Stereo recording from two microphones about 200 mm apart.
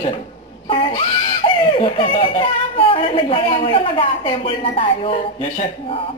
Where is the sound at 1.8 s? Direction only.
25° left (ahead or behind).